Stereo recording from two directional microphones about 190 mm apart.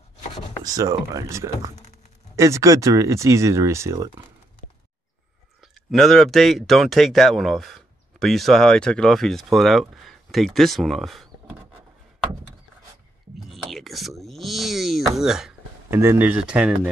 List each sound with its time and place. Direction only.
0.7 s speech: 20° right (ahead or behind)
5.9 s speech: centre (ahead or behind)
13.4 s a sound: centre (ahead or behind)
16.0 s speech: 10° right (ahead or behind)